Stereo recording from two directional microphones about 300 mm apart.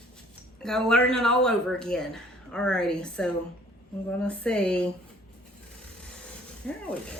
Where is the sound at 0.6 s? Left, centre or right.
Centre.